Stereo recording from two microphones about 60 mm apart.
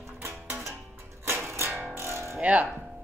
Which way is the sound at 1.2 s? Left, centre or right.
Right.